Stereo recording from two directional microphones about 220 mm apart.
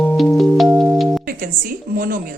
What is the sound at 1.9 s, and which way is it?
Speech, 40° right (ahead or behind).